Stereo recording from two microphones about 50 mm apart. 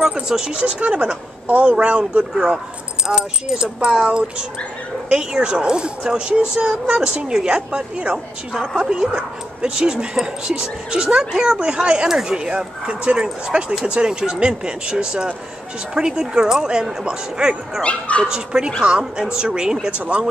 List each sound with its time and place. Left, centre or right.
0.0 s speech: centre
3.1 s speech: centre
17.8 s speech: left
18.3 s speech: centre
19.9 s speech: right